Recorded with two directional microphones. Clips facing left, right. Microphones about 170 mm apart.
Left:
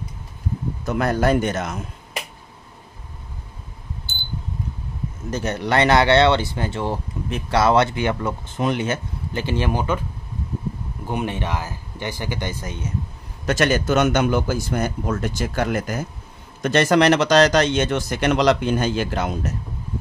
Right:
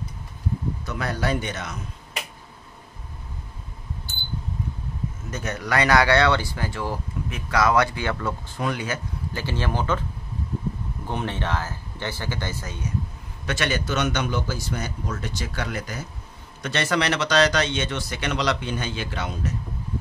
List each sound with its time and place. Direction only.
0.8 s speech: 50° left (ahead or behind)
5.3 s speech: 30° left (ahead or behind); by 10.0 s 15° left (ahead or behind)
11.1 s speech: 10° left (ahead or behind)
13.5 s speech: 45° left (ahead or behind)